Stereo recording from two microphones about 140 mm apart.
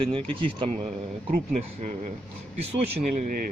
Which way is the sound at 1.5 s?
60° right (ahead or behind).